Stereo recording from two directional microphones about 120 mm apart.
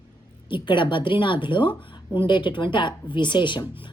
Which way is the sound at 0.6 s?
40° left (ahead or behind).